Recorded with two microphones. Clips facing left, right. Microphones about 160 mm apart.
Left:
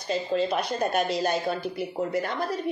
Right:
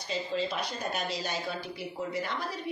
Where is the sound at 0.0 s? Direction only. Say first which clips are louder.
Left 6 dB; 55° left (ahead or behind).